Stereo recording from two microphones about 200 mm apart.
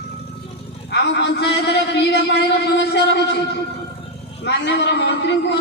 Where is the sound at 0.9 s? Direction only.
60° left (ahead or behind).